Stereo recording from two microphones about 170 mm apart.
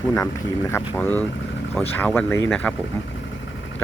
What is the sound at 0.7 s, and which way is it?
Speech, 15° left (ahead or behind).